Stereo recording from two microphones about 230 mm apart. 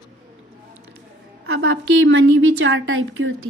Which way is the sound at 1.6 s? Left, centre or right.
Right.